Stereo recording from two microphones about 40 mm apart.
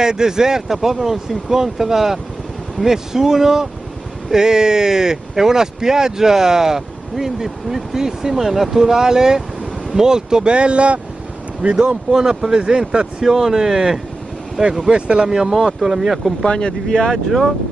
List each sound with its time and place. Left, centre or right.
0.0 s speech: centre
12.1 s speech: centre
13.2 s speech: centre
14.9 s speech: right
15.2 s speech: centre
16.4 s speech: left
17.1 s speech: centre